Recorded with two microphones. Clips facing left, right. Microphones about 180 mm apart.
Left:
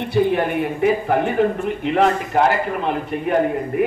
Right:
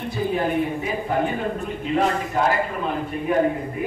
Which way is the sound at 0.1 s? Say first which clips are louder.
Left 5 dB; 70° left (ahead or behind).